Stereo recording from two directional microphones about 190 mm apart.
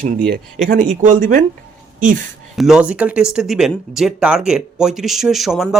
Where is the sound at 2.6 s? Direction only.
5° right (ahead or behind).